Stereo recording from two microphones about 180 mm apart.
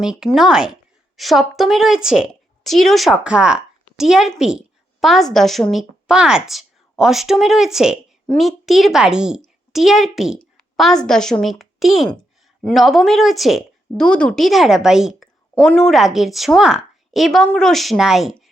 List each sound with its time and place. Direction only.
0.0 s a woman's voice: 5° right (ahead or behind)